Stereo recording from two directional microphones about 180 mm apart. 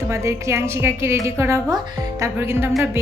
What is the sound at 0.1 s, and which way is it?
A woman's voice, 15° right (ahead or behind).